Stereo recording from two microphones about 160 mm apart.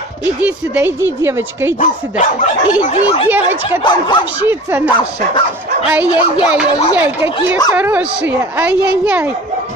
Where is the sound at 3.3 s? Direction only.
10° right (ahead or behind).